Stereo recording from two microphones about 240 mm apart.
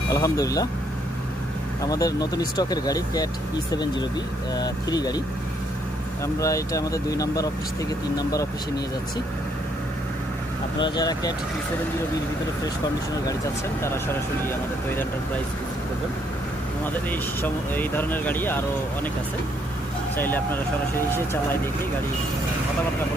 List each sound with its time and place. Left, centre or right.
0.1 s speech: centre
1.8 s speech: centre
6.2 s speech: centre
10.8 s speech: centre
13.8 s speech: centre
16.8 s speech: centre
20.1 s speech: centre